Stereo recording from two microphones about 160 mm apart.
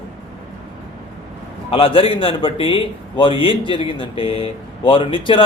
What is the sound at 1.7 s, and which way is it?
A man's voice, 35° left (ahead or behind).